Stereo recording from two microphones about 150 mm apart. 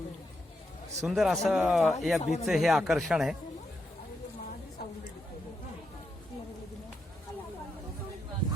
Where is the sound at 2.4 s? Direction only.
Centre (ahead or behind).